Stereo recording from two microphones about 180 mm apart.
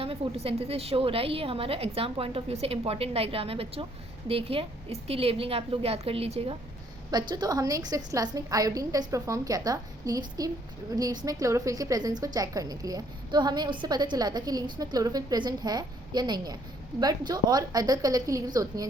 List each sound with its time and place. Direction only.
0.0 s a woman's voice: 35° right (ahead or behind)
7.1 s a woman's voice: 25° right (ahead or behind)